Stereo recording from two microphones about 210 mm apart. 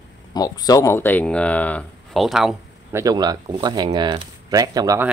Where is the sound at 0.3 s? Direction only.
20° left (ahead or behind); by 2.5 s centre (ahead or behind).